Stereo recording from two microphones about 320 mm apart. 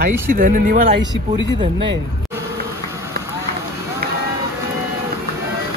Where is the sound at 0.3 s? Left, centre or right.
Right.